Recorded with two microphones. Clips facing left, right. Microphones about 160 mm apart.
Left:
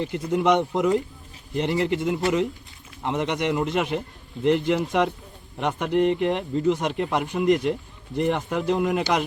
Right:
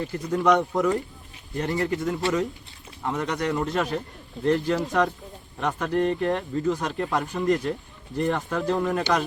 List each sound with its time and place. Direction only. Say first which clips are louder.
0.0 s speech: left 1 dB; 20° left (ahead or behind)